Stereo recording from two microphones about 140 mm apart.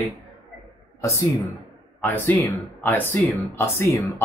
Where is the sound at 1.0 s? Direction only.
20° left (ahead or behind).